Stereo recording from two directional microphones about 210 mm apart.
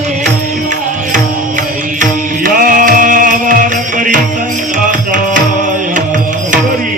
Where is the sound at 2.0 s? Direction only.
40° right (ahead or behind).